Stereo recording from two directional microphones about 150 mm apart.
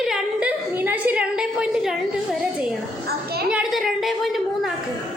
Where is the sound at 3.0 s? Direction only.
90° right.